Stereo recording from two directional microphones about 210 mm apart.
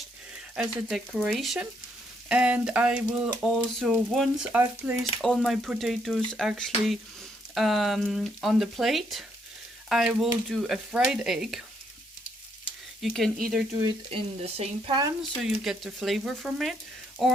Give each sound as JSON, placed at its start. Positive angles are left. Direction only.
{"t": 0.5, "sound": "speech", "side_deg": 0}
{"t": 13.0, "sound": "speech", "side_deg": 0}
{"t": 13.8, "sound": "frying", "side_deg": -25}
{"t": 15.4, "sound": "speech", "side_deg": 0}